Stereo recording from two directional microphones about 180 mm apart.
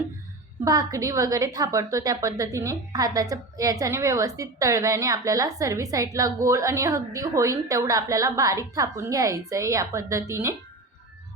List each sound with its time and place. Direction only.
0.6 s a woman's voice: 20° right (ahead or behind)